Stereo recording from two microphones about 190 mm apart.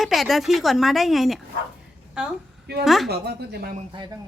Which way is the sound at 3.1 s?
55° right (ahead or behind).